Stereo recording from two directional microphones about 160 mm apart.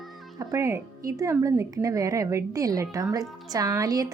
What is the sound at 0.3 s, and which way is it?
Speech, 20° right (ahead or behind).